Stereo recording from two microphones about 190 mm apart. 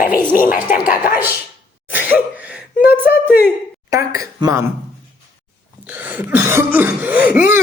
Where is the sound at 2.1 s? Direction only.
5° right (ahead or behind).